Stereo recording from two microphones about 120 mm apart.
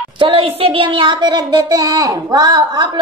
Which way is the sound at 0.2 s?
45° right (ahead or behind).